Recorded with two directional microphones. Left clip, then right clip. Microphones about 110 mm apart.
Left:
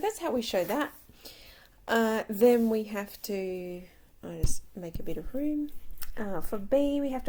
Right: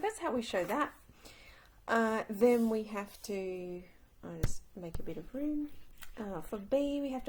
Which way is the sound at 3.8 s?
30° left (ahead or behind).